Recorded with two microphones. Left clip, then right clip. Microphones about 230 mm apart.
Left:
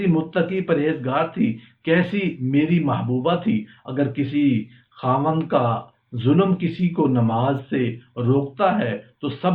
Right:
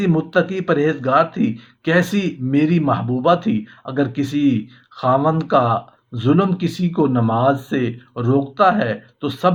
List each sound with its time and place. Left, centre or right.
0.0 s speech: right